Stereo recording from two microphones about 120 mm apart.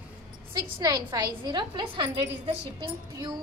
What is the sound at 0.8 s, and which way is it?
A woman's voice, 35° right (ahead or behind).